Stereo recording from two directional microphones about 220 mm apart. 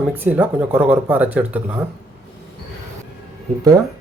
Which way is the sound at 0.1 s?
5° right (ahead or behind).